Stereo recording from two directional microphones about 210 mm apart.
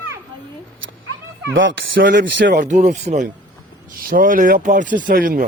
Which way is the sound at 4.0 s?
40° right (ahead or behind).